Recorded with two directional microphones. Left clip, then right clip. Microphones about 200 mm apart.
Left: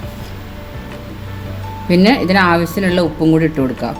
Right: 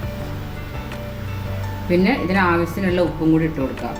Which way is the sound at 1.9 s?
60° left (ahead or behind).